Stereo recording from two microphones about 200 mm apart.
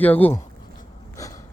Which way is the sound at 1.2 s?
15° left (ahead or behind).